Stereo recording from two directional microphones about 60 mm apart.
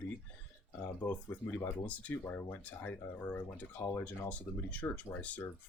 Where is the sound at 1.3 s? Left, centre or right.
Left.